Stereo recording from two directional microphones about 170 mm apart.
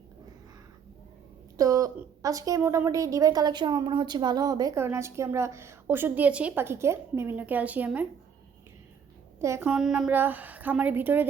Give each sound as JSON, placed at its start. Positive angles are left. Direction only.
{"t": 1.5, "sound": "a woman's voice", "side_deg": -20}
{"t": 9.6, "sound": "a woman's voice", "side_deg": -5}